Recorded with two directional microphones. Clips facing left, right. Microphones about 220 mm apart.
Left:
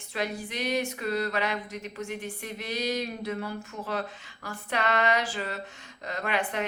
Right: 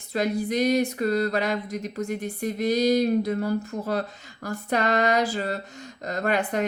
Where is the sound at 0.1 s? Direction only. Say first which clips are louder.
Right 8 dB; 40° right (ahead or behind).